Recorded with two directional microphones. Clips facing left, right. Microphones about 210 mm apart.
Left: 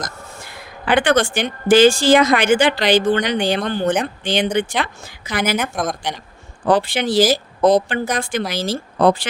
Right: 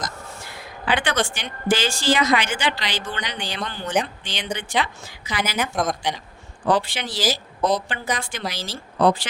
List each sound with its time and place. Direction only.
0.9 s speech: 50° left (ahead or behind)
5.7 s speech: centre (ahead or behind)
6.7 s speech: 50° left (ahead or behind)